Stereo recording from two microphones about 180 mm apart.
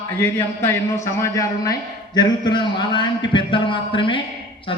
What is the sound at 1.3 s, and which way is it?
A man's voice, 20° left (ahead or behind).